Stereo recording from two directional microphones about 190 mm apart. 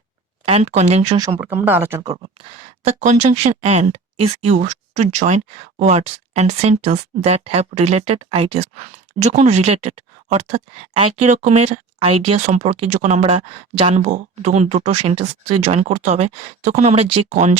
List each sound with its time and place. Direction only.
0.4 s speech: 35° right (ahead or behind)
1.4 s speech: 10° right (ahead or behind)
2.4 s speech: 35° right (ahead or behind)